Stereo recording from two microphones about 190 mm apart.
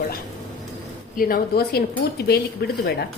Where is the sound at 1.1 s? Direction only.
50° left (ahead or behind).